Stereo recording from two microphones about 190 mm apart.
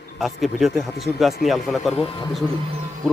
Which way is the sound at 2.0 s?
25° left (ahead or behind).